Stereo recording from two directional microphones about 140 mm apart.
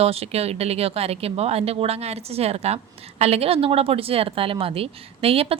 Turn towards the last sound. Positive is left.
turn(degrees=-45)  # may be behind; listen again after turning